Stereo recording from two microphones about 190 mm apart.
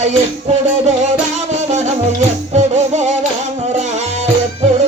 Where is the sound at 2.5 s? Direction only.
35° right (ahead or behind).